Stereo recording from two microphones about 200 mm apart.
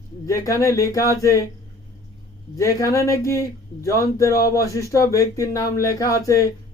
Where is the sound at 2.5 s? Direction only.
15° left (ahead or behind).